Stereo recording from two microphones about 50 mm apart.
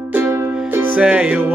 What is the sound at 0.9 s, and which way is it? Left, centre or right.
Music, right.